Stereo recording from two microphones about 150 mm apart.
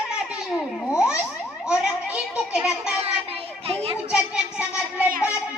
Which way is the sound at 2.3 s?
5° right (ahead or behind).